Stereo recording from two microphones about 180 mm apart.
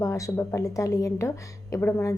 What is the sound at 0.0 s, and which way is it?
A woman's voice, 15° left (ahead or behind).